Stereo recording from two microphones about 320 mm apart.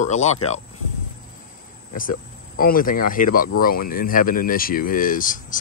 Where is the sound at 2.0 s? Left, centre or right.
Left.